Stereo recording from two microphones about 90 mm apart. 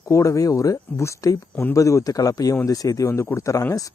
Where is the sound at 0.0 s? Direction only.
35° left (ahead or behind).